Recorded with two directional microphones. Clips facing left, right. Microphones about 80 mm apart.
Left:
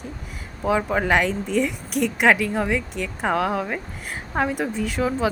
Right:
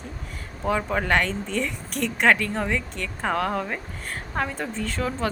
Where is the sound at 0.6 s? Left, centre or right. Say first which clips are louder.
Left 3 dB; centre.